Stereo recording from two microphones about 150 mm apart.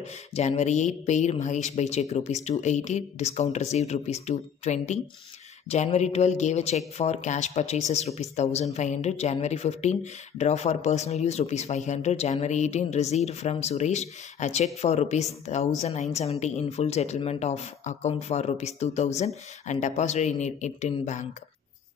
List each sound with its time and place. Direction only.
0.0 s speech: 50° left (ahead or behind)